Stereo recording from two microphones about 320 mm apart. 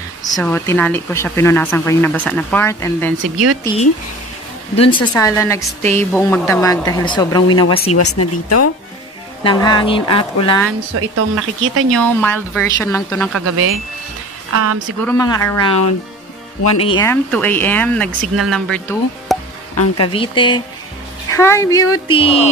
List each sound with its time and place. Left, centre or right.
0.2 s speech: centre
3.2 s speech: right
4.7 s speech: centre
7.9 s speech: left
9.4 s speech: centre
11.0 s speech: right
11.9 s speech: centre
14.5 s speech: right
15.0 s speech: centre
16.8 s speech: centre
20.1 s speech: centre